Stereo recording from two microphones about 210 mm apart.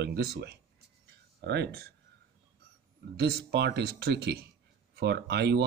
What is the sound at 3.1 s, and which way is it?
Speech, 50° right (ahead or behind).